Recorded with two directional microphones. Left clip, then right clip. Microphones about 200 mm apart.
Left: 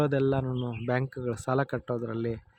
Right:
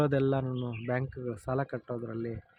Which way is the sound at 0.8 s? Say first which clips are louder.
Left 4 dB; 20° left (ahead or behind).